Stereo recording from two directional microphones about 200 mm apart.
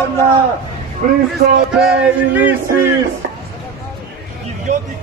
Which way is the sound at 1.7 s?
5° right (ahead or behind).